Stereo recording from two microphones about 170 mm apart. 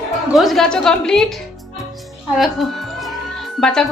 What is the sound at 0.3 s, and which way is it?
Speech, centre (ahead or behind).